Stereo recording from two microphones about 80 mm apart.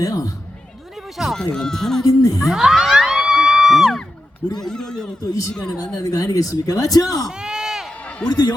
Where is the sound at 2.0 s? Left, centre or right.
Left.